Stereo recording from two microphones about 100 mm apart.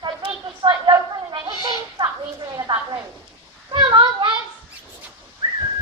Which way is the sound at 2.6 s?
45° right (ahead or behind).